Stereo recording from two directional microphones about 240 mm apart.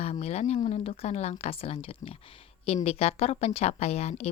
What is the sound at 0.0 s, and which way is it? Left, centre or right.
A woman's voice, left.